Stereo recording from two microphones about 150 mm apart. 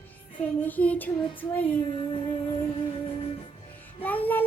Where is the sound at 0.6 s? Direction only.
10° left (ahead or behind).